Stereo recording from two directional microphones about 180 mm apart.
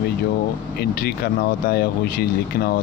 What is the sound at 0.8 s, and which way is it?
Speech, 60° left (ahead or behind).